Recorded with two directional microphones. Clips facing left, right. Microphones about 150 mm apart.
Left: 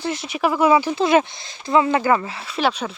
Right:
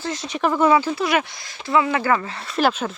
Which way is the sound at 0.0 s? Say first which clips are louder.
Left 1 dB; 15° left (ahead or behind).